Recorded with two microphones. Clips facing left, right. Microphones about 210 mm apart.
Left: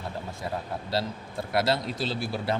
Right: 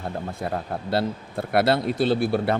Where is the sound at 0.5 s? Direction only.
55° right (ahead or behind).